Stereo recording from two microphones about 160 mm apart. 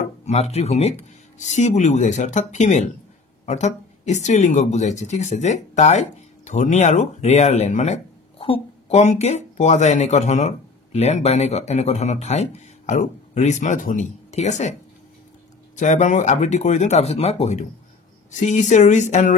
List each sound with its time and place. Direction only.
0.2 s speech: 40° left (ahead or behind)
15.7 s speech: 50° left (ahead or behind)